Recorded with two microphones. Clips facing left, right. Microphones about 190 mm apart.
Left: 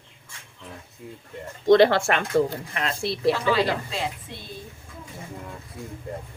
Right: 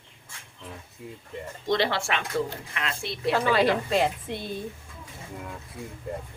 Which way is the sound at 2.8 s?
35° left (ahead or behind).